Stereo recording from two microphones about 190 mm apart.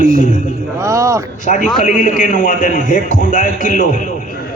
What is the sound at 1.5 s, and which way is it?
A man's voice, 40° left (ahead or behind).